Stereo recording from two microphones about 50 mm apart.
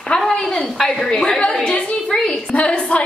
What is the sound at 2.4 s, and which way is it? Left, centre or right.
Speech, left.